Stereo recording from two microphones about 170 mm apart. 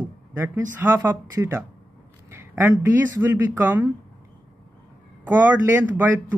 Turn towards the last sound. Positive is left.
turn(degrees=-10)  # may be behind; listen again after turning